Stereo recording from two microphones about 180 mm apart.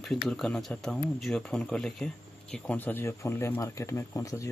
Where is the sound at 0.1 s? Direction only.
5° left (ahead or behind).